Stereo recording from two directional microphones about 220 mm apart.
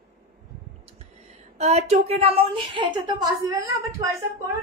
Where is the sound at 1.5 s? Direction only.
30° right (ahead or behind); by 4.1 s 15° right (ahead or behind).